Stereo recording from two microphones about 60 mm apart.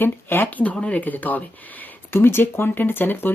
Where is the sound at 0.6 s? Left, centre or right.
Centre.